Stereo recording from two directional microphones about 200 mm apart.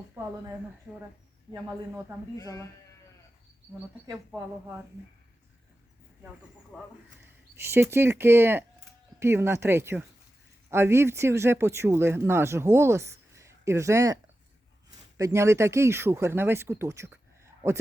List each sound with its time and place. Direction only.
2.4 s speech: 15° left (ahead or behind)
6.7 s speech: 5° right (ahead or behind)
15.2 s speech: 15° right (ahead or behind)